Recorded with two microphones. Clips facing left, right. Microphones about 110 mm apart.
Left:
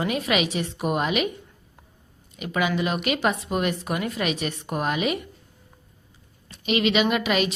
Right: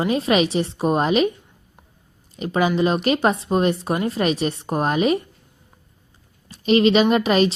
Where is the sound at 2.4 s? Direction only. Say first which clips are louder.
Right 5 dB; 35° right (ahead or behind).